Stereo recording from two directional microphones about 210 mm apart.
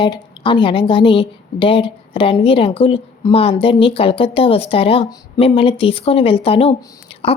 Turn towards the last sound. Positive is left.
turn(degrees=30)  # may be behind; listen again after turning